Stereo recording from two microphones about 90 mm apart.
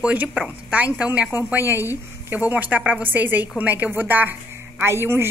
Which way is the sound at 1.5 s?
25° right (ahead or behind).